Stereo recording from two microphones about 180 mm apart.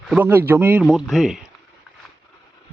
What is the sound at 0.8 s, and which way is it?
Speech, centre (ahead or behind).